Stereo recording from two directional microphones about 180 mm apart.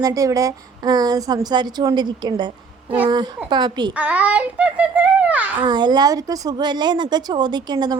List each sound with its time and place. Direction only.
0.0 s a woman's voice: 20° right (ahead or behind)
3.9 s a child's voice: 5° right (ahead or behind)
5.5 s a woman's voice: 25° right (ahead or behind)